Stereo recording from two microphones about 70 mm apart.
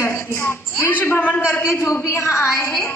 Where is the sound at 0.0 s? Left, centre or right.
Left.